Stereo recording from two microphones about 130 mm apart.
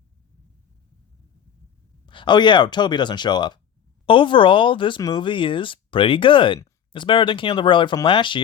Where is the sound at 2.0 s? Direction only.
35° left (ahead or behind).